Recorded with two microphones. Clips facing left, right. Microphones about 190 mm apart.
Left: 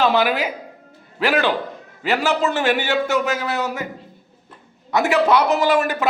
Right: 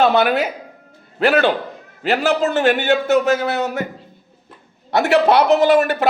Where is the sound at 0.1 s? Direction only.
45° right (ahead or behind).